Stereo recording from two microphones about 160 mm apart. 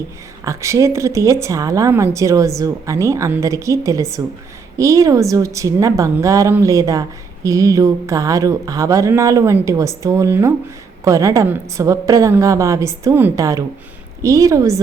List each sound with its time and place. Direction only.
0.4 s speech: 20° right (ahead or behind)